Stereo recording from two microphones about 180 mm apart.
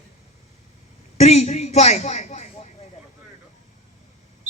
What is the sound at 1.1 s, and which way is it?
Speech, 40° left (ahead or behind).